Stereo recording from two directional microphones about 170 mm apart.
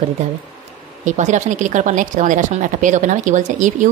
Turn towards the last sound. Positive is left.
turn(degrees=-50)  # may be behind; listen again after turning